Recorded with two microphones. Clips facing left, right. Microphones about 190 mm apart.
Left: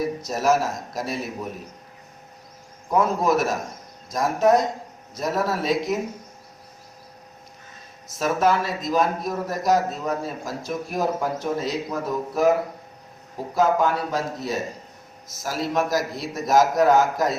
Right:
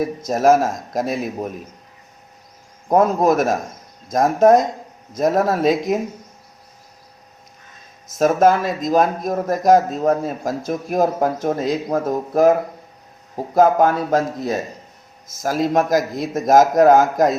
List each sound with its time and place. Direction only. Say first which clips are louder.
0.0 s speech: right 6 dB; 50° right (ahead or behind)
2.9 s speech: right 5 dB; 45° right (ahead or behind)
8.2 s speech: right 6 dB; 45° right (ahead or behind)